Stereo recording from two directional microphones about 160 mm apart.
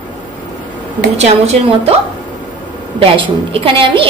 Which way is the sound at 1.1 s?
40° right (ahead or behind).